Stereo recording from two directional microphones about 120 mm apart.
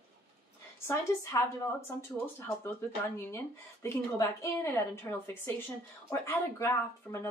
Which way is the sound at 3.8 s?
25° left (ahead or behind).